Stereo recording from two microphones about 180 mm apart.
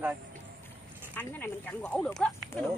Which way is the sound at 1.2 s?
10° left (ahead or behind).